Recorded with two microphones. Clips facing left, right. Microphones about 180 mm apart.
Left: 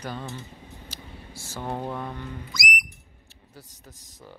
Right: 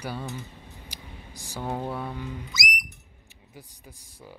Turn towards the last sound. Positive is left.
turn(degrees=-10)  # may be behind; listen again after turning